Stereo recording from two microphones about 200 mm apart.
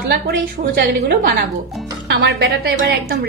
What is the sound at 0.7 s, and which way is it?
A woman's voice, 50° right (ahead or behind).